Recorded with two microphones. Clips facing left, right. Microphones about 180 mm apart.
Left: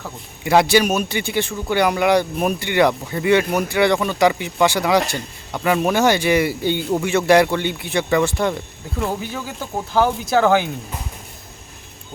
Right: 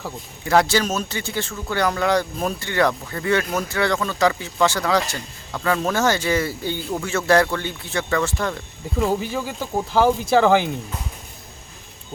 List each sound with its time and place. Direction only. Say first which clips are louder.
0.4 s speech: left 3 dB; 15° left (ahead or behind)
9.0 s speech: right 3 dB; 5° right (ahead or behind)